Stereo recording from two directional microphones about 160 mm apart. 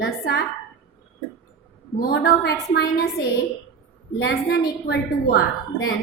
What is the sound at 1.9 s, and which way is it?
Speech, 65° left (ahead or behind).